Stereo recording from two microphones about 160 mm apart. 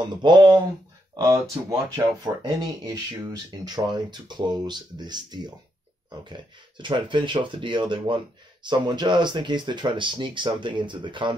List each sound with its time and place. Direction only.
0.2 s speech: 30° right (ahead or behind)
6.8 s speech: 30° right (ahead or behind)